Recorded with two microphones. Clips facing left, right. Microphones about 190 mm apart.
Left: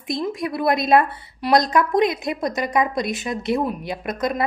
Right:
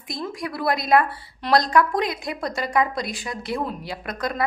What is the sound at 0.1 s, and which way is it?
A woman's voice, 25° left (ahead or behind).